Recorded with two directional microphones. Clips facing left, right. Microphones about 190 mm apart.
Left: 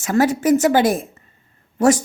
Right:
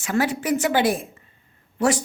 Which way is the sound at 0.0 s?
45° left (ahead or behind).